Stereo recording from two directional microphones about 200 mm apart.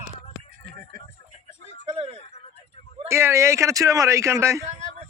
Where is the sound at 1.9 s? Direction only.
30° right (ahead or behind).